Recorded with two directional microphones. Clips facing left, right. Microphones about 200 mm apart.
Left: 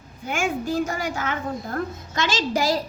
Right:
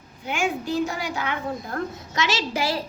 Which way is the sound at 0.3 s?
45° left (ahead or behind).